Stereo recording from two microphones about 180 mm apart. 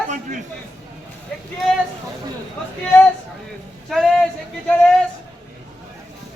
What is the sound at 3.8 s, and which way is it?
Speech, centre (ahead or behind).